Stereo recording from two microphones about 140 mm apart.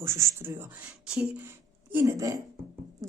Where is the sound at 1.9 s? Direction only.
20° right (ahead or behind).